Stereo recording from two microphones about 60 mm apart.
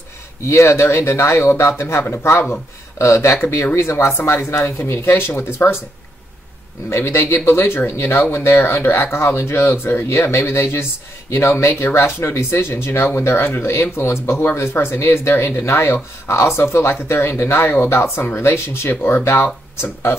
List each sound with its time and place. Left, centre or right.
0.5 s speech: left
6.9 s speech: left